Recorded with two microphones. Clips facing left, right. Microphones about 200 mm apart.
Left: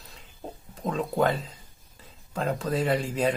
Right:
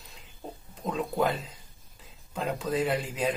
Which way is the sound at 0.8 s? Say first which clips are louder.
Left 3 dB; centre (ahead or behind).